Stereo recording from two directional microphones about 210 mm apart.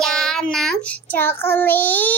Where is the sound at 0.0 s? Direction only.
Centre (ahead or behind).